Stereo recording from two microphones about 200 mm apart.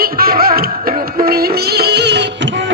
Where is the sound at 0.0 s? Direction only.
50° right (ahead or behind).